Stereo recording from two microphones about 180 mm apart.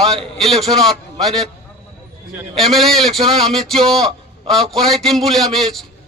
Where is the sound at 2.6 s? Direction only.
Centre (ahead or behind).